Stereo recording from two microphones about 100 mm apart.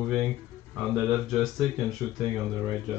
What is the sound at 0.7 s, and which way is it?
Speech, centre (ahead or behind).